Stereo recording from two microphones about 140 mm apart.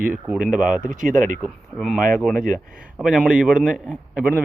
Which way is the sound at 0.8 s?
70° right (ahead or behind).